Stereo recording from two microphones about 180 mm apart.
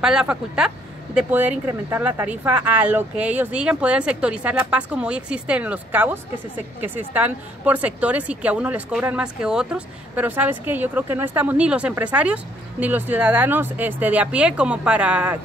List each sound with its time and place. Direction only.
0.0 s speech: 5° right (ahead or behind)